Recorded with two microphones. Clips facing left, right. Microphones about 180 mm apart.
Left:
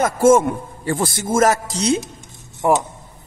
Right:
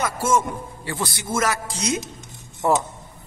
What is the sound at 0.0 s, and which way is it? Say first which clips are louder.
A man's voice: left 9 dB; 50° left (ahead or behind).